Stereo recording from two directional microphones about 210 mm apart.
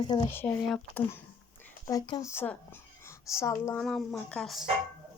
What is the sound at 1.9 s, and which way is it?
Speech, 20° left (ahead or behind).